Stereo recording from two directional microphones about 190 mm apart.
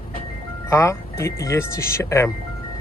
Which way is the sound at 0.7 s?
15° left (ahead or behind).